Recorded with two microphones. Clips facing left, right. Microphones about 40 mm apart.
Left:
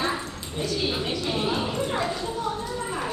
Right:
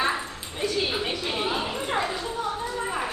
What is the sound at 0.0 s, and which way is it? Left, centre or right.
Dog, centre.